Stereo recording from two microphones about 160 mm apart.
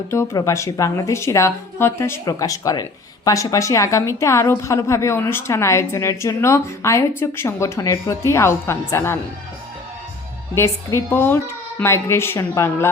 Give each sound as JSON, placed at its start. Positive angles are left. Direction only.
{"t": 0.1, "sound": "a woman's voice", "side_deg": 20}
{"t": 10.5, "sound": "a woman's voice", "side_deg": 15}